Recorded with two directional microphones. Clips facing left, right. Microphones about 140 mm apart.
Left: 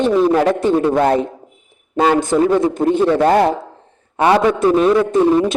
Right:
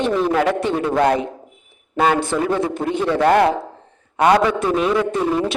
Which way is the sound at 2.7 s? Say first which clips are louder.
Left 6 dB; 45° left (ahead or behind).